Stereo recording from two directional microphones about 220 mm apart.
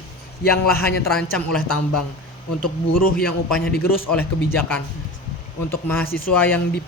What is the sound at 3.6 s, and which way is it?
Speech, 45° left (ahead or behind).